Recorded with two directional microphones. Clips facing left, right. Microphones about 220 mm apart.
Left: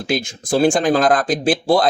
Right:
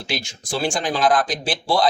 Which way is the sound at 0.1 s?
55° left (ahead or behind).